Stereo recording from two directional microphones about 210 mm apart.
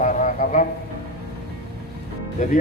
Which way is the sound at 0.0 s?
35° left (ahead or behind).